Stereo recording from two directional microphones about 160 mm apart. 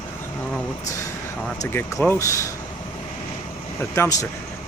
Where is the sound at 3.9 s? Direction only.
20° left (ahead or behind).